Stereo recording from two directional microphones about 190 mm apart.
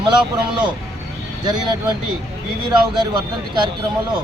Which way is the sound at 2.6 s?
20° right (ahead or behind).